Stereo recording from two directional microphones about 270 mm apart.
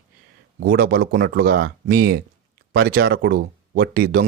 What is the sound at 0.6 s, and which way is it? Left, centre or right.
Speech, right.